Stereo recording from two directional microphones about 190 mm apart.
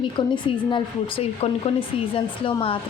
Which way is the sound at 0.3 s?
25° left (ahead or behind).